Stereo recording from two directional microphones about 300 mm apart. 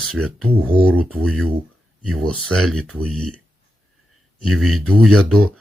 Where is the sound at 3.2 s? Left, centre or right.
Right.